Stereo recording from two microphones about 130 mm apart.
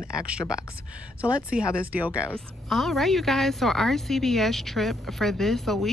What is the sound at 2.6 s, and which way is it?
A woman's voice, centre (ahead or behind).